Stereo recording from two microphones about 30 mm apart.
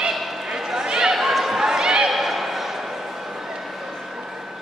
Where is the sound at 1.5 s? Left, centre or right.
Centre.